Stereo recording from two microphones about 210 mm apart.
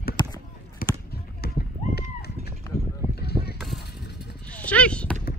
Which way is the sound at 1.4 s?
50° left (ahead or behind).